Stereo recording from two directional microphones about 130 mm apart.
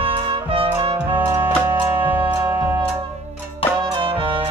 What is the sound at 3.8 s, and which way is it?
Music, 40° right (ahead or behind).